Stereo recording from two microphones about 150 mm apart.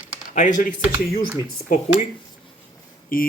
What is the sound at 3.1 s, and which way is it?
Speech, 70° left (ahead or behind).